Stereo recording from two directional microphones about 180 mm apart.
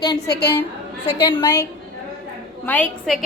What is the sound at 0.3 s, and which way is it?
Speech, 65° left (ahead or behind).